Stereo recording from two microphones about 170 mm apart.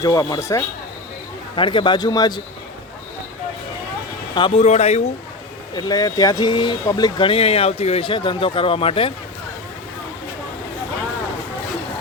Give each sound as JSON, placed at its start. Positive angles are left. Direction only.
{"t": 0.0, "sound": "a man's voice", "side_deg": 20}
{"t": 1.5, "sound": "a man's voice", "side_deg": 30}
{"t": 4.4, "sound": "speech", "side_deg": 35}
{"t": 5.7, "sound": "speech", "side_deg": 25}